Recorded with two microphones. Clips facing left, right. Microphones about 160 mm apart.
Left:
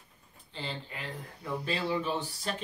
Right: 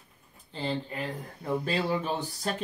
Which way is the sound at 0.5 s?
40° right (ahead or behind).